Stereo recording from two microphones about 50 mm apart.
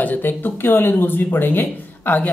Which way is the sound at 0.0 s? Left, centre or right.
Left.